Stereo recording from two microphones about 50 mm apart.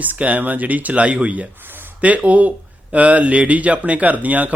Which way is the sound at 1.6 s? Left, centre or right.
Right.